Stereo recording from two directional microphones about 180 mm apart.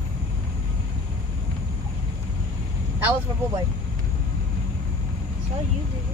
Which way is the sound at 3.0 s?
10° right (ahead or behind).